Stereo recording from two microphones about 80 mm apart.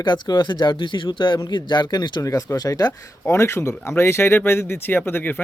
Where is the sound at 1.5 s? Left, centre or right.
Left.